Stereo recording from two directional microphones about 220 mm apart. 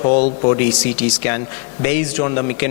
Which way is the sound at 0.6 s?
10° left (ahead or behind).